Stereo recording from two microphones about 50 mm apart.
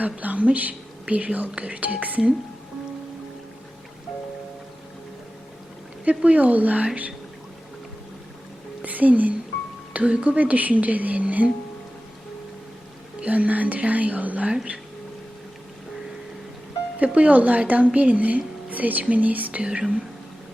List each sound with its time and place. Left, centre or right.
0.0 s speech: right
6.1 s speech: right
8.8 s a sound: right
9.9 s speech: right
13.2 s speech: right
17.0 s speech: right
19.6 s speech: centre